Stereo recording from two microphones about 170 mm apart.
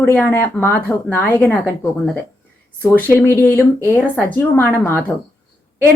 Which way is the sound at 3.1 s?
15° left (ahead or behind).